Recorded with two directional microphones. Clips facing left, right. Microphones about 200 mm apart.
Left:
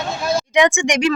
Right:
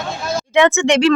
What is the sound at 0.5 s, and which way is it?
Speech, 15° left (ahead or behind).